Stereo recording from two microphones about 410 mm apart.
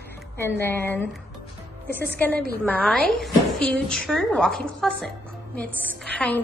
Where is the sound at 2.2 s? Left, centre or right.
Centre.